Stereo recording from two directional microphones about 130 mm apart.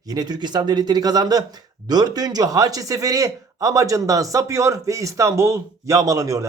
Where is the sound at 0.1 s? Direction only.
30° right (ahead or behind).